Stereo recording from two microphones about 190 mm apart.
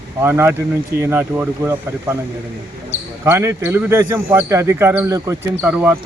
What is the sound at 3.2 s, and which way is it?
Speech, 15° right (ahead or behind).